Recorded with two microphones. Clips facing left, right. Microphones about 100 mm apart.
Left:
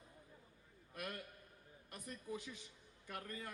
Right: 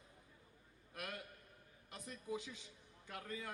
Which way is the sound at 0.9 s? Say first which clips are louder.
Left 1 dB; 90° right.